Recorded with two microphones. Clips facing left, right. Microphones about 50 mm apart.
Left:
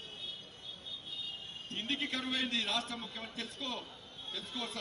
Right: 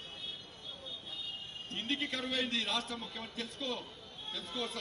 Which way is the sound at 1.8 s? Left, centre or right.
Left.